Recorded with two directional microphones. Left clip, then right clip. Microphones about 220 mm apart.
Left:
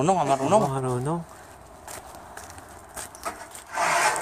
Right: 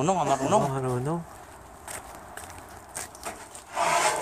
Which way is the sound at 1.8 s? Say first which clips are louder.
Even; 25° left (ahead or behind).